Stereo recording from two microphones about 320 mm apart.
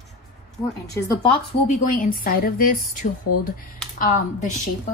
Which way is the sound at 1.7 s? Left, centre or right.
Left.